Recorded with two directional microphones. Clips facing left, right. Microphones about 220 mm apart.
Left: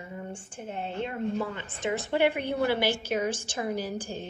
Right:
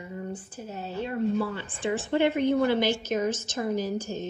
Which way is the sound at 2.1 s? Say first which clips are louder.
Right 4 dB; 15° left (ahead or behind).